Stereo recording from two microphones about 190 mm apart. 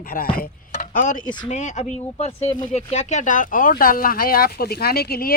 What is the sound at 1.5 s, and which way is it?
Speech, 40° left (ahead or behind).